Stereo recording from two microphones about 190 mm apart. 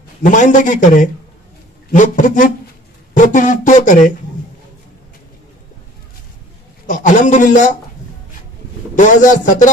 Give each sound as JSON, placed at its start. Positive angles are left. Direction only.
{"t": 0.2, "sound": "speech", "side_deg": 40}
{"t": 6.9, "sound": "speech", "side_deg": 40}
{"t": 8.9, "sound": "speech", "side_deg": 40}